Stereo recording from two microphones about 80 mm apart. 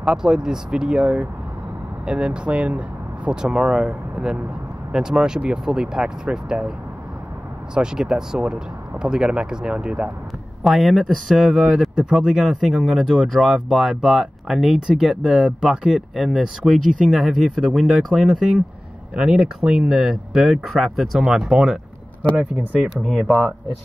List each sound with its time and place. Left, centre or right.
0.0 s speech: centre
7.7 s speech: centre
10.6 s speech: centre
23.0 s speech: centre